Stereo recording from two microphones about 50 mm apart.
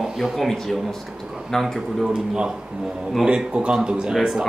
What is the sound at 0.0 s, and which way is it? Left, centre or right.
A man's voice, centre.